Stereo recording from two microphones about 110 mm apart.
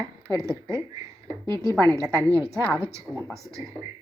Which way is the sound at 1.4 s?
40° right (ahead or behind).